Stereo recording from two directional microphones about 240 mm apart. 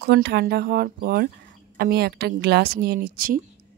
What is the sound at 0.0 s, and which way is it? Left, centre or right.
Speech, right.